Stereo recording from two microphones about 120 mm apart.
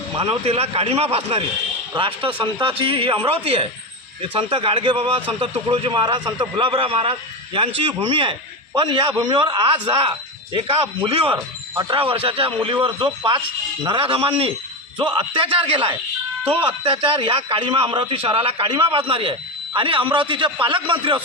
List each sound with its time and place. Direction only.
0.2 s a man's voice: 55° right (ahead or behind)